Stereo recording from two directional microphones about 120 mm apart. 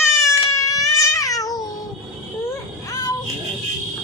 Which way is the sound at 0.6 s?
30° left (ahead or behind).